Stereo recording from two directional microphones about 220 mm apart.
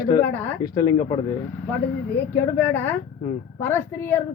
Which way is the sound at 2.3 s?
10° left (ahead or behind).